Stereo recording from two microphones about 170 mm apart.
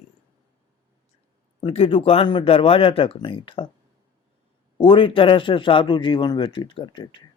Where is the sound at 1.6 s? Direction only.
35° left (ahead or behind).